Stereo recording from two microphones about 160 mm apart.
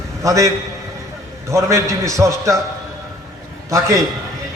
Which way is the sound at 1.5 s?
20° right (ahead or behind).